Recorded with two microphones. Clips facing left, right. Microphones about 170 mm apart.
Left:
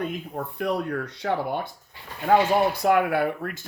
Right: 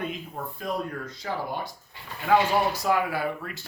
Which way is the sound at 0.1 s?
60° left (ahead or behind).